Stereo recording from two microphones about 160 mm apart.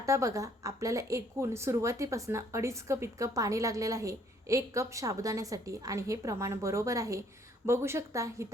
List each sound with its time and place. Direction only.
0.0 s a woman's voice: 20° right (ahead or behind)